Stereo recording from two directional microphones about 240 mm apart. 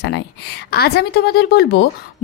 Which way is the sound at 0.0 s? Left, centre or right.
Left.